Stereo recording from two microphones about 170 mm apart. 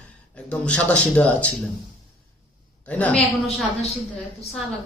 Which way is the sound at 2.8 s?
10° left (ahead or behind).